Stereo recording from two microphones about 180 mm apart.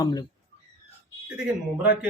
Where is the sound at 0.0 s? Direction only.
20° left (ahead or behind).